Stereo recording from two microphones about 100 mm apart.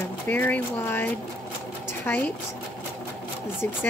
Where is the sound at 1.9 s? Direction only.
20° left (ahead or behind).